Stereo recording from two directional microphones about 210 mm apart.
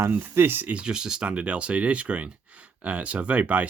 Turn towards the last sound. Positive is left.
turn(degrees=-5)  # may be behind; listen again after turning